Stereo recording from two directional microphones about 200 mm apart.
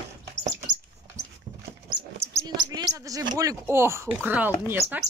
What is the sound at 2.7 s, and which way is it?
Speech, 20° right (ahead or behind).